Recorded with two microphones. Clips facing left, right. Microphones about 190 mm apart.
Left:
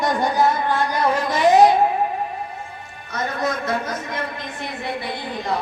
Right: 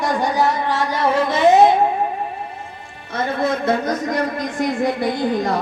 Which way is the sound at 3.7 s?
35° right (ahead or behind).